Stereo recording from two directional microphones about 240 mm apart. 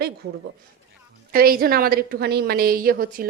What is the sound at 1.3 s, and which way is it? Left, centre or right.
A woman's voice, right.